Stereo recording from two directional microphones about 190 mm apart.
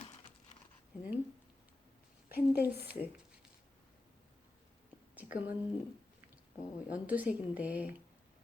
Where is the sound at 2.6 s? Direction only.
10° right (ahead or behind).